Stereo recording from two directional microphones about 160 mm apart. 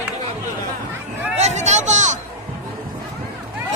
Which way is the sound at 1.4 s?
45° right (ahead or behind).